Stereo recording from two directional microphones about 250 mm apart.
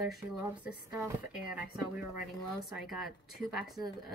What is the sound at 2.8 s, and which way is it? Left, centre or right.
Speech, centre.